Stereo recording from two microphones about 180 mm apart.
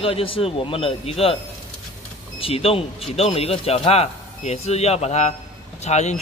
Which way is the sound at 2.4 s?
30° left (ahead or behind).